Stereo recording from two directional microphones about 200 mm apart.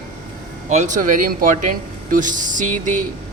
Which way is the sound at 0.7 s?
35° right (ahead or behind).